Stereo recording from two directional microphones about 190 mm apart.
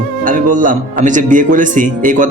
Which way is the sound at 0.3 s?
45° right (ahead or behind).